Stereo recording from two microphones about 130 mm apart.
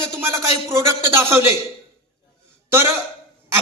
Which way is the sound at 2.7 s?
20° right (ahead or behind).